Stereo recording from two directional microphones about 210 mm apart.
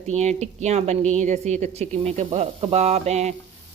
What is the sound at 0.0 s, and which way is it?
A woman's voice, 30° right (ahead or behind).